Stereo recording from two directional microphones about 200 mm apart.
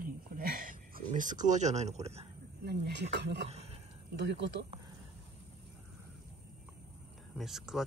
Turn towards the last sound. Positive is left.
turn(degrees=0)  # may be behind; listen again after turning